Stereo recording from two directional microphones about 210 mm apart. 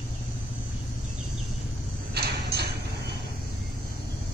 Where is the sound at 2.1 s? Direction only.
50° right (ahead or behind).